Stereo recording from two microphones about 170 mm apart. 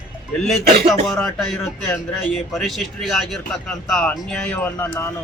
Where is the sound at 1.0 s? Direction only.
Centre (ahead or behind).